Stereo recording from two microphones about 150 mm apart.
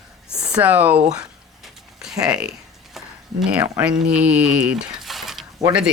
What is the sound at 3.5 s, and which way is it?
Speech, 10° right (ahead or behind).